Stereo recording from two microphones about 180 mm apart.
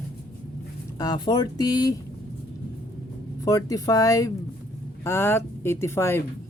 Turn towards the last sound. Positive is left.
turn(degrees=15)  # may be behind; listen again after turning